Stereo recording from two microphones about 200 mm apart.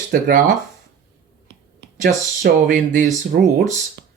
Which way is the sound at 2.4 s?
40° right (ahead or behind).